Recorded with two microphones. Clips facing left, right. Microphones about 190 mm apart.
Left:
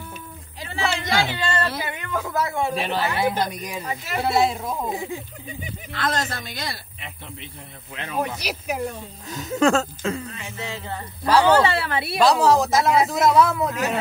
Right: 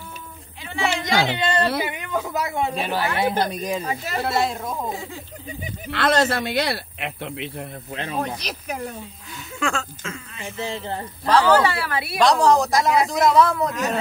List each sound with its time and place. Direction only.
1.0 s speech: 20° right (ahead or behind)
2.7 s speech: centre (ahead or behind)
3.2 s speech: 25° right (ahead or behind)
4.2 s speech: centre (ahead or behind)
4.9 s speech: 15° left (ahead or behind)
5.9 s speech: 75° right (ahead or behind)
7.9 s a sound: 35° right (ahead or behind)
8.4 s speech: 5° left (ahead or behind)
9.3 s speech: 40° left (ahead or behind)
10.6 s a sound: 35° right (ahead or behind)
11.4 s a woman's voice: 25° left (ahead or behind)
12.2 s speech: 5° left (ahead or behind)